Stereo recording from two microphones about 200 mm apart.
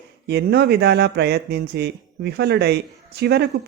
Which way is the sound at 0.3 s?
55° right (ahead or behind).